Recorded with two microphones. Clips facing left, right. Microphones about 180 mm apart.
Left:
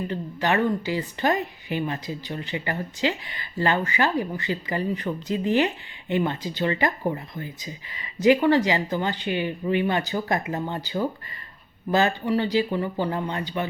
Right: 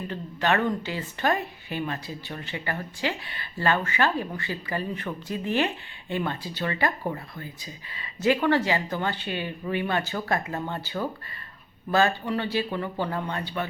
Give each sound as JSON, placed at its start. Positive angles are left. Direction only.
{"t": 0.1, "sound": "speech", "side_deg": 15}